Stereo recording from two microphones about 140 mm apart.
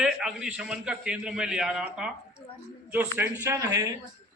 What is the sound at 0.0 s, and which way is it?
A man's voice, 5° right (ahead or behind).